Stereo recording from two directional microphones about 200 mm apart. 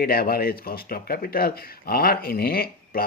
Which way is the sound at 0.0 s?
50° left (ahead or behind).